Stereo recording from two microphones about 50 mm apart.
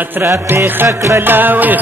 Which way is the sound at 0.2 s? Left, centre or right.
Right.